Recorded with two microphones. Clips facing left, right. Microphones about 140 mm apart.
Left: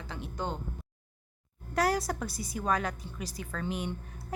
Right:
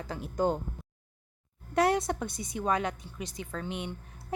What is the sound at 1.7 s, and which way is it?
A woman's voice, 25° right (ahead or behind).